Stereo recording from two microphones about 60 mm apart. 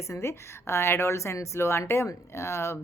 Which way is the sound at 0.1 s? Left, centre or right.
Left.